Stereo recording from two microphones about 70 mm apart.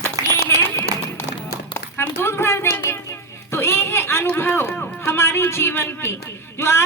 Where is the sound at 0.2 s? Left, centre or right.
Right.